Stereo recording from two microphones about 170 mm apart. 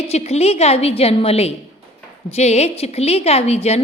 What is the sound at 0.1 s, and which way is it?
A woman's voice, 40° left (ahead or behind).